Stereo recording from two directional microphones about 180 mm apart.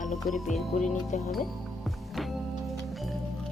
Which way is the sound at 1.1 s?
45° left (ahead or behind).